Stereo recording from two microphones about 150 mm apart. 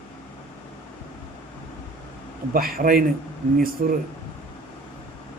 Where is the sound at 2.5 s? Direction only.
70° right (ahead or behind).